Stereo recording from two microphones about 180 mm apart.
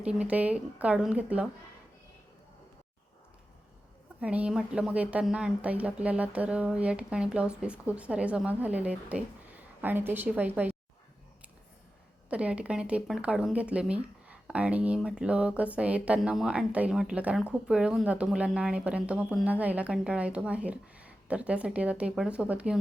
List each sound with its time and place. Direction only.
0.0 s speech: 5° right (ahead or behind)
4.2 s speech: 5° right (ahead or behind)
12.3 s speech: 5° right (ahead or behind)